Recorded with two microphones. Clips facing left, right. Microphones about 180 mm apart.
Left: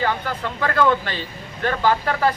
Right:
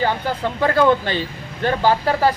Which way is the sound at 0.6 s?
30° right (ahead or behind).